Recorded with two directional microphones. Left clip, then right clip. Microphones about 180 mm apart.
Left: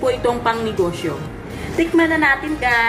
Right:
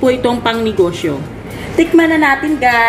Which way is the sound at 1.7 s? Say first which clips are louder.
Right 6 dB; 45° right (ahead or behind).